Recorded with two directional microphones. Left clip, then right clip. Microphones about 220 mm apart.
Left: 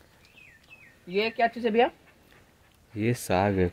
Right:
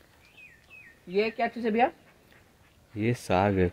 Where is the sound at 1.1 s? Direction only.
35° left (ahead or behind).